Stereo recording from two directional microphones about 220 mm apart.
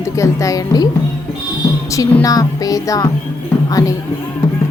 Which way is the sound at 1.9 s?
15° left (ahead or behind).